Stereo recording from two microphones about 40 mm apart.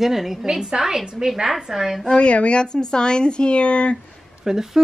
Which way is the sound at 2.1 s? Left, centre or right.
Left.